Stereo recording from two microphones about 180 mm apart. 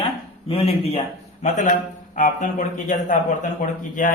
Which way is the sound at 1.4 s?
45° left (ahead or behind).